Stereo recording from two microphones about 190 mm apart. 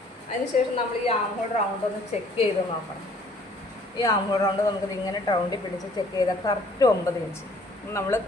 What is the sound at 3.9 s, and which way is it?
Speech, 20° left (ahead or behind).